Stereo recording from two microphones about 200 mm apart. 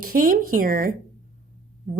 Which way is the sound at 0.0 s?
45° right (ahead or behind).